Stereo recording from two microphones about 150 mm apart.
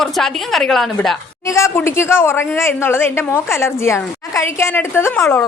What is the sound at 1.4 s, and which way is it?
A woman's voice, 20° left (ahead or behind).